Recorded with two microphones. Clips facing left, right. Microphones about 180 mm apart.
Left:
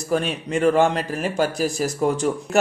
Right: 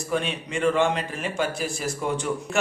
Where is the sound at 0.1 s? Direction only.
40° left (ahead or behind).